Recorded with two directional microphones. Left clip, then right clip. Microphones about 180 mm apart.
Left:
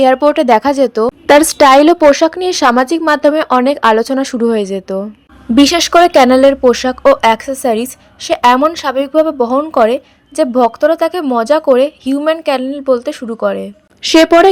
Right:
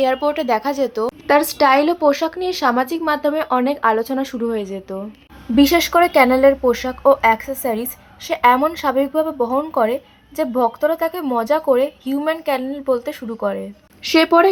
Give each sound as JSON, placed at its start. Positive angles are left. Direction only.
{"t": 0.0, "sound": "speech", "side_deg": 40}